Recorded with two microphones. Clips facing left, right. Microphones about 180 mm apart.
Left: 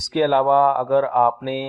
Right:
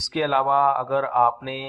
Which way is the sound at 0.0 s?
50° left (ahead or behind).